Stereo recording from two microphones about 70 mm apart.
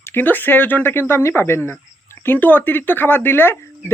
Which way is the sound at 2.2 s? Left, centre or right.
Left.